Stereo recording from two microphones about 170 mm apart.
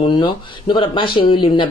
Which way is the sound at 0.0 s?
30° left (ahead or behind).